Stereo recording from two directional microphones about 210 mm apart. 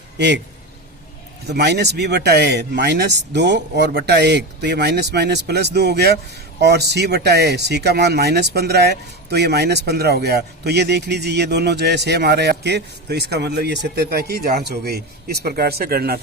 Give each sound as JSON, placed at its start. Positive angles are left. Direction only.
{"t": 1.5, "sound": "speech", "side_deg": -50}